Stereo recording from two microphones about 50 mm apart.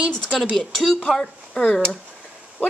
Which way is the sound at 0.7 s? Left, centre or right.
Centre.